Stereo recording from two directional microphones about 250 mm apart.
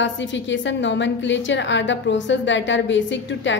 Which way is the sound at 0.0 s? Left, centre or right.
Left.